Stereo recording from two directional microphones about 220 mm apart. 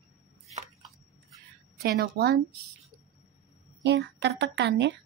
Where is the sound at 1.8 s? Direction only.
45° right (ahead or behind).